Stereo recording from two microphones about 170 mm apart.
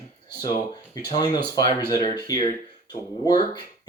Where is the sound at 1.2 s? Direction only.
25° left (ahead or behind).